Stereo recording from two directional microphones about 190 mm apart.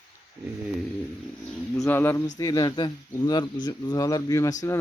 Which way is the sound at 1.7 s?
15° left (ahead or behind).